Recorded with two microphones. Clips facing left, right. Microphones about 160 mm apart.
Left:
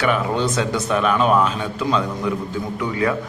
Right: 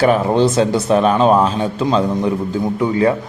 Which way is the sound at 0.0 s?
35° right (ahead or behind).